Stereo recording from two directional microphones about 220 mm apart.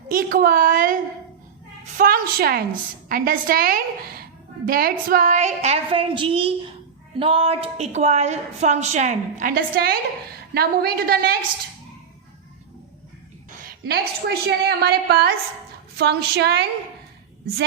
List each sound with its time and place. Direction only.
0.1 s a woman's voice: 40° right (ahead or behind)
2.0 s a woman's voice: 40° right (ahead or behind)
13.6 s a woman's voice: 45° right (ahead or behind)